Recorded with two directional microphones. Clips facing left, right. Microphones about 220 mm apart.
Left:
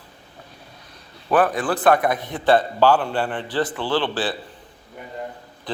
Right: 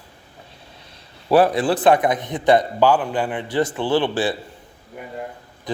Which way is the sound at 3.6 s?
20° right (ahead or behind).